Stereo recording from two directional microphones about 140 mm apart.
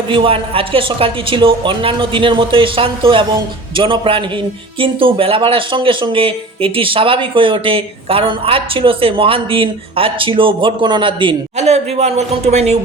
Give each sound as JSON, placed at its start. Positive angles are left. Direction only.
{"t": 0.1, "sound": "speech", "side_deg": -40}
{"t": 11.5, "sound": "a man's voice", "side_deg": -50}